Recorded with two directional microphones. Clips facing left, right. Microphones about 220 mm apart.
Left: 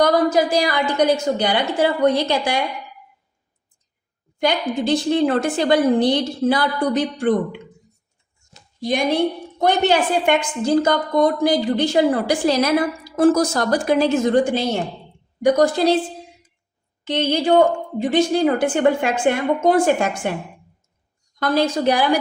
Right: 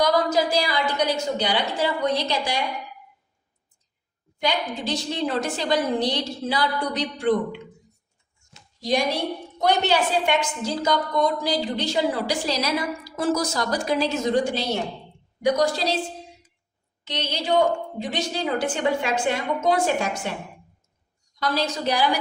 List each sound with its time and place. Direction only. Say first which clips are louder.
0.0 s a woman's voice: left 5 dB; 55° left (ahead or behind)
4.4 s a woman's voice: left 6 dB; 50° left (ahead or behind)
8.8 s a woman's voice: left 5 dB; 55° left (ahead or behind)
17.0 s a woman's voice: left 10 dB; 55° left (ahead or behind)
21.3 s a woman's voice: left 7 dB; 55° left (ahead or behind)